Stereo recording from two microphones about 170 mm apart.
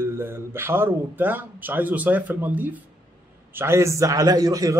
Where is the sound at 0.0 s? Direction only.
15° right (ahead or behind).